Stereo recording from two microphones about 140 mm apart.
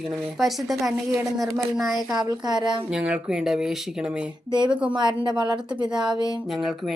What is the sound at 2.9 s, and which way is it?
A woman's voice, 5° right (ahead or behind).